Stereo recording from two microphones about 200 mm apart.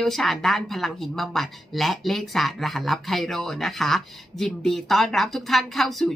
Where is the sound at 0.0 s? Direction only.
Centre (ahead or behind).